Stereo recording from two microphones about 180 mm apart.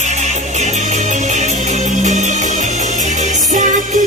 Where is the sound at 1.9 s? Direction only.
40° right (ahead or behind).